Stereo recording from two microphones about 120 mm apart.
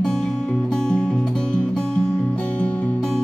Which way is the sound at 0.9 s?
10° left (ahead or behind).